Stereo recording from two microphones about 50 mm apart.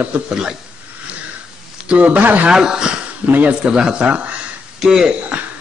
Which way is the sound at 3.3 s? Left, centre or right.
Right.